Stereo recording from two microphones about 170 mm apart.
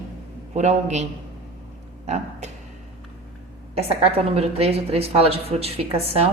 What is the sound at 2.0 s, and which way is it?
Speech, 40° right (ahead or behind).